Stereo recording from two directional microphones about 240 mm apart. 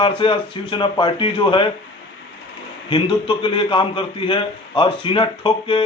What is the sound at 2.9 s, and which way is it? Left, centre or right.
A man's voice, left.